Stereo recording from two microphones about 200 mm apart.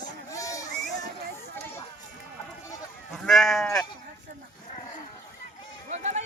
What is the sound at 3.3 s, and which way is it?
Sheep, centre (ahead or behind).